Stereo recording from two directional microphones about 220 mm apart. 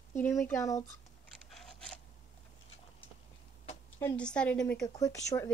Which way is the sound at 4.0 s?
5° left (ahead or behind).